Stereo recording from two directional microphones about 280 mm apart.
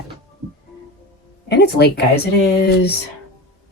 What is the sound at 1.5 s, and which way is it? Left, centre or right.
Speech, left.